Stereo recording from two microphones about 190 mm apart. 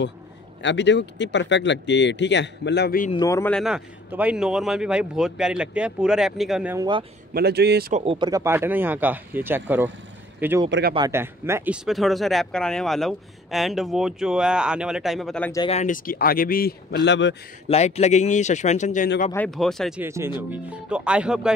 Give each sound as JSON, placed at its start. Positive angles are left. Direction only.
{"t": 0.6, "sound": "speech", "side_deg": 70}
{"t": 3.1, "sound": "speech", "side_deg": 20}
{"t": 3.5, "sound": "speech", "side_deg": -5}
{"t": 6.7, "sound": "speech", "side_deg": -20}
{"t": 7.3, "sound": "a man's voice", "side_deg": -60}
{"t": 7.9, "sound": "speech", "side_deg": -30}
{"t": 8.3, "sound": "speech", "side_deg": -15}
{"t": 10.7, "sound": "speech", "side_deg": -55}
{"t": 11.0, "sound": "speech", "side_deg": -15}
{"t": 15.7, "sound": "a man's voice", "side_deg": 40}
{"t": 17.6, "sound": "speech", "side_deg": 35}
{"t": 19.3, "sound": "speech", "side_deg": 5}
{"t": 20.0, "sound": "speech", "side_deg": -15}